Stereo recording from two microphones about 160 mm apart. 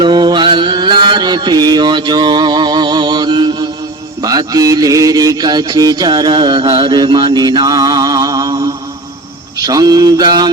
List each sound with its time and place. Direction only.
0.0 s mantra: 30° right (ahead or behind)